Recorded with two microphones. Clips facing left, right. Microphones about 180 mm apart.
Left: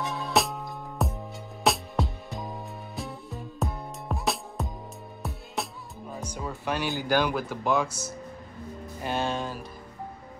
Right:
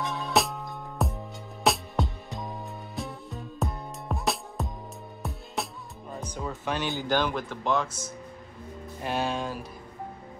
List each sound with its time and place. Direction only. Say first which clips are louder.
0.0 s music: even; centre (ahead or behind)
6.2 s speech: even; 5° left (ahead or behind)